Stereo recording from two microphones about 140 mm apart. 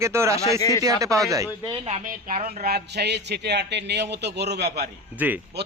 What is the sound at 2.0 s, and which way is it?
Speech, 75° right (ahead or behind).